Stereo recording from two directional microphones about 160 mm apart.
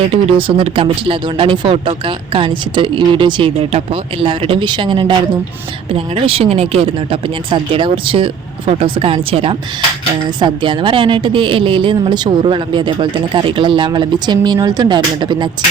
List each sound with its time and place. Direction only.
0.1 s speech: 35° right (ahead or behind)